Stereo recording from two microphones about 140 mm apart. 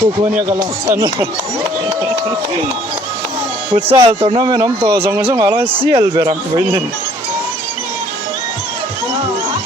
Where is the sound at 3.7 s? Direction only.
40° right (ahead or behind).